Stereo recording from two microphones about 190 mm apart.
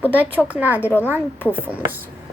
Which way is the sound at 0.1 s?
10° right (ahead or behind).